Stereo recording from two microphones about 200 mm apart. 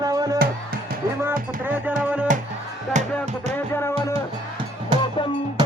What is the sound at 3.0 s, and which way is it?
Music, 35° right (ahead or behind).